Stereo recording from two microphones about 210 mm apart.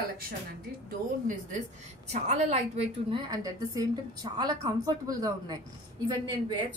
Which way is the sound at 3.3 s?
15° right (ahead or behind).